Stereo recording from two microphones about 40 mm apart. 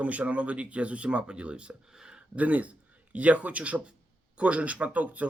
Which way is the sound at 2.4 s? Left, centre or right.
Right.